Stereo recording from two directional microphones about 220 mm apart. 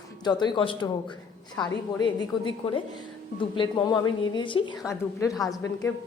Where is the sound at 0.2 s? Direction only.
20° left (ahead or behind).